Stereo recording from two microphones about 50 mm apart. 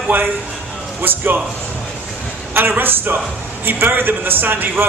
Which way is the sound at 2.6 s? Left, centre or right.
Right.